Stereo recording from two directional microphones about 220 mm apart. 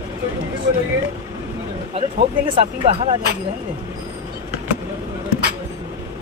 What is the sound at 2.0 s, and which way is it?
Speech, 25° right (ahead or behind).